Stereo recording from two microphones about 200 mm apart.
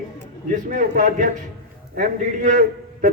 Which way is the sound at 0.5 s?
40° right (ahead or behind).